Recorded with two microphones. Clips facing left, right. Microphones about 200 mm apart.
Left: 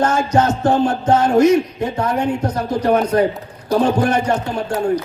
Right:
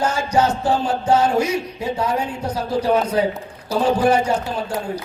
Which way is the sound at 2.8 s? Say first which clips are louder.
Left 4 dB; 55° left (ahead or behind).